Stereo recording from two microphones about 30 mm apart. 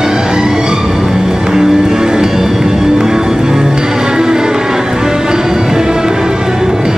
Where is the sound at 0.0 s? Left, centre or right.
Right.